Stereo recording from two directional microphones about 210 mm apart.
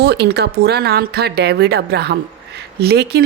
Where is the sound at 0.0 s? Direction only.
50° right (ahead or behind).